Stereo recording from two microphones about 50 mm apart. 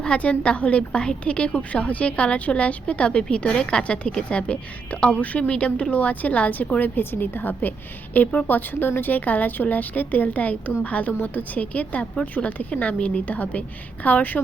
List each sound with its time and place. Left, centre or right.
0.0 s a woman's voice: left